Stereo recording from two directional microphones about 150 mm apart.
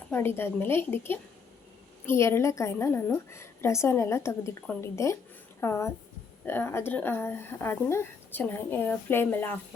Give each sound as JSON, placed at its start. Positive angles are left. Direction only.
{"t": 0.1, "sound": "speech", "side_deg": 15}